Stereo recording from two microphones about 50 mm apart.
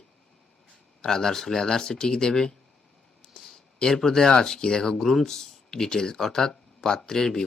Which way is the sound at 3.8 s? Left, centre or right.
Centre.